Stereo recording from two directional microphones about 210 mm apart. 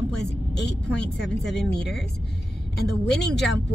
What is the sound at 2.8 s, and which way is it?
Speech, 55° left (ahead or behind).